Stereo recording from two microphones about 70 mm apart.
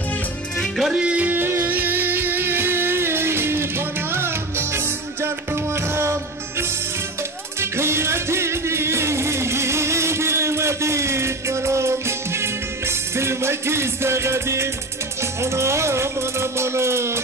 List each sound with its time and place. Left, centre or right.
0.6 s music: centre
0.9 s music: centre
1.4 s music: right
7.6 s music: right